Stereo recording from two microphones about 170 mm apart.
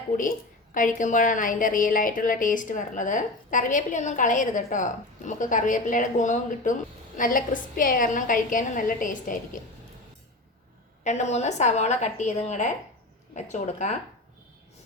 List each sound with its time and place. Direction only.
0.2 s a woman's voice: 50° left (ahead or behind)
11.0 s a woman's voice: 45° left (ahead or behind)